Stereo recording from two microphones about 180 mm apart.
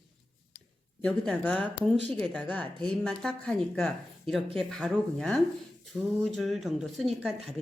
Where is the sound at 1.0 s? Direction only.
5° left (ahead or behind).